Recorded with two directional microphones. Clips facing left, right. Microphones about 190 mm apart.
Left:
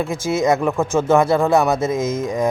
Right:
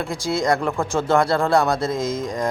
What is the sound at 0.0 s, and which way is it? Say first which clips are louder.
A man's voice: left 4 dB; 20° left (ahead or behind).